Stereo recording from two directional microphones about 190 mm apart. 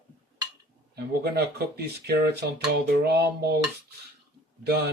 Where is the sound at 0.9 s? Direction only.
55° right (ahead or behind).